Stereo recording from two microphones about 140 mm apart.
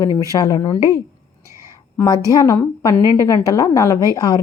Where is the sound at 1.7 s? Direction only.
25° left (ahead or behind).